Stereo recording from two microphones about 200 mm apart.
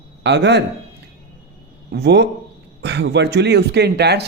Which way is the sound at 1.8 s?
55° right (ahead or behind).